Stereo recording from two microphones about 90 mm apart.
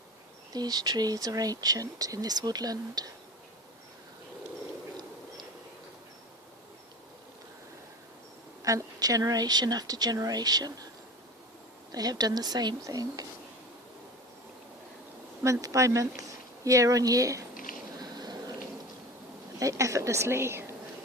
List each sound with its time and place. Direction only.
0.5 s speech: 45° right (ahead or behind)
8.6 s speech: 40° right (ahead or behind)
11.9 s speech: 45° right (ahead or behind)
15.4 s speech: 35° right (ahead or behind)
18.0 s a sound: 45° right (ahead or behind)
19.5 s speech: 35° right (ahead or behind)